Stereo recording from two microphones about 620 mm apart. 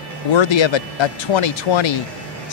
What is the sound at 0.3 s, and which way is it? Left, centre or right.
Speech, left.